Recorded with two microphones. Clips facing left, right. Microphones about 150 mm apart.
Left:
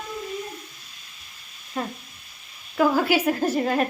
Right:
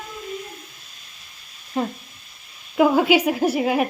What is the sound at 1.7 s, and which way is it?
A woman's voice, 20° right (ahead or behind).